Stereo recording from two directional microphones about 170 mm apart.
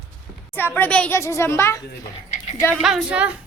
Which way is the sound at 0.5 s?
10° left (ahead or behind).